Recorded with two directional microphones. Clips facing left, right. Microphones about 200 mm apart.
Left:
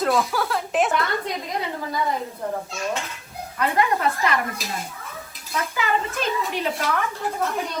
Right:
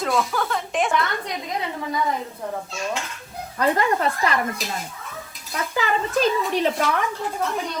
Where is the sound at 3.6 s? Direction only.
35° right (ahead or behind).